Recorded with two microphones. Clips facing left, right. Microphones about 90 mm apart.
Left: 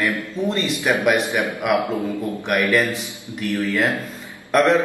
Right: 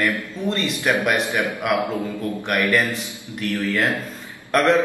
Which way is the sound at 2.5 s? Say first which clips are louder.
Left 2 dB; centre (ahead or behind).